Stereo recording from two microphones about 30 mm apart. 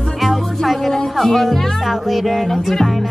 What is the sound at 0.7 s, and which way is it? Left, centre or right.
Speech, centre.